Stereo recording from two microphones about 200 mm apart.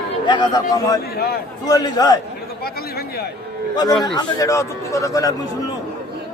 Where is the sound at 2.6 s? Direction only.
50° left (ahead or behind).